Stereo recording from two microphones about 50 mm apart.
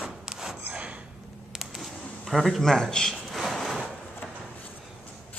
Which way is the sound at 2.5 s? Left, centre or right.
Centre.